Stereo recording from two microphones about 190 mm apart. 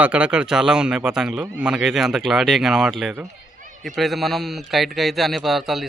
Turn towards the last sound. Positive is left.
turn(degrees=0)  # may be behind; listen again after turning